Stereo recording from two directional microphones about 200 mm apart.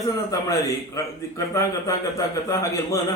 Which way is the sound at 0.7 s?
15° left (ahead or behind).